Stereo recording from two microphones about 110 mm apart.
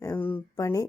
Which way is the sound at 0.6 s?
30° left (ahead or behind).